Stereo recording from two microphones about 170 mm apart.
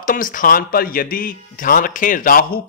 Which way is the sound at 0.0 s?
55° left (ahead or behind).